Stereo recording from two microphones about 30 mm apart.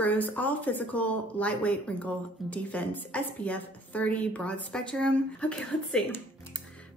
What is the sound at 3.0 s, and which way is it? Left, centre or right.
Speech, left.